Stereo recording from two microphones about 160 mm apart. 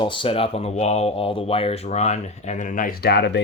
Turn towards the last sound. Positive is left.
turn(degrees=90)